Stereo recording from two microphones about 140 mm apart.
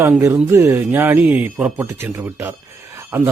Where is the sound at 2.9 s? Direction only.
20° right (ahead or behind).